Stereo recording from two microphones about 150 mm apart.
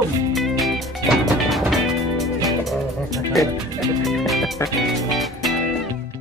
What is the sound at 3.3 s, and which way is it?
Speech, centre (ahead or behind).